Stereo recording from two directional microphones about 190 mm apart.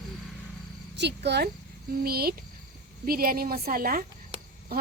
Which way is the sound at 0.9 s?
65° right (ahead or behind).